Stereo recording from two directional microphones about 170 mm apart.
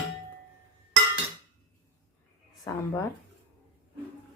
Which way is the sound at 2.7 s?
20° left (ahead or behind).